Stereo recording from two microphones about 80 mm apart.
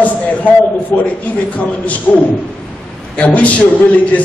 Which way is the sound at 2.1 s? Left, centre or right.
Centre.